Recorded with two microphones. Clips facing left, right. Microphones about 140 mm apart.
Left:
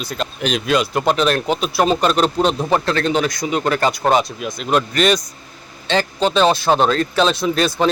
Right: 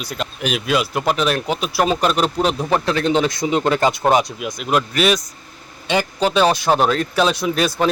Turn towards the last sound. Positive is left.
turn(degrees=-10)  # may be behind; listen again after turning